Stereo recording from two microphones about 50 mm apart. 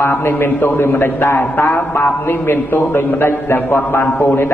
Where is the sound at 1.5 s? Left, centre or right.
Left.